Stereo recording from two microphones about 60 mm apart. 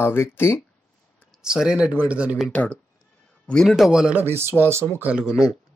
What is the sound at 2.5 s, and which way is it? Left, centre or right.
Speech, left.